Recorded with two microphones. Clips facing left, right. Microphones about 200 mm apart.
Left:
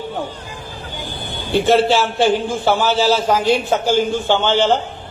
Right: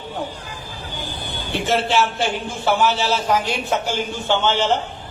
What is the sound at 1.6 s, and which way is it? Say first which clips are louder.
A man's voice: left 4 dB; 30° left (ahead or behind).